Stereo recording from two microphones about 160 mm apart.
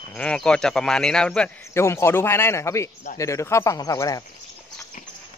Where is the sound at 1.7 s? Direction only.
15° left (ahead or behind).